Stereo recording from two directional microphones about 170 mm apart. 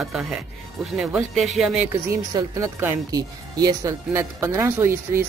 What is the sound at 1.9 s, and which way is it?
Speech, 20° right (ahead or behind).